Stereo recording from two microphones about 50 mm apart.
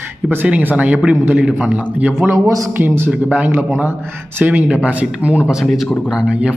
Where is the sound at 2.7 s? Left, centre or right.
Right.